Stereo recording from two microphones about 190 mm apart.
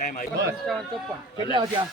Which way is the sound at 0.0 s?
45° left (ahead or behind).